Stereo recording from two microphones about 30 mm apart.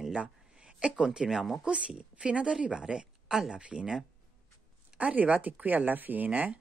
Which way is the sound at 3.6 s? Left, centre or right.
Right.